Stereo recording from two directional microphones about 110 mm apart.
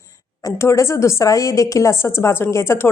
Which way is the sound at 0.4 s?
25° left (ahead or behind).